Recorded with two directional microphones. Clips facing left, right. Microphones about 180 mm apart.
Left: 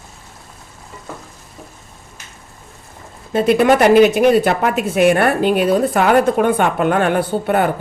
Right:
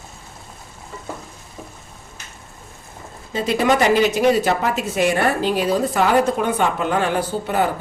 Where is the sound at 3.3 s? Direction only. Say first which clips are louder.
Left 6 dB; 60° left (ahead or behind).